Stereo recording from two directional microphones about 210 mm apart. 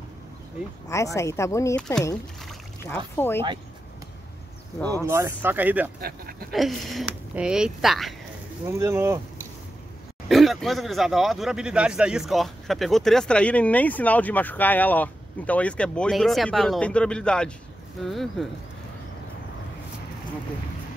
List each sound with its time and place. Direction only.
0.8 s speech: 15° left (ahead or behind)
3.2 s speech: 10° left (ahead or behind)
4.8 s speech: 15° right (ahead or behind)
5.9 s speech: 45° right (ahead or behind)
6.5 s speech: centre (ahead or behind)
8.6 s speech: 15° right (ahead or behind)
10.2 s speech: centre (ahead or behind)